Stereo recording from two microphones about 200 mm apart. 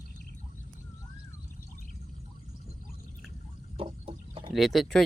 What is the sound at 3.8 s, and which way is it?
Chicken, 25° right (ahead or behind).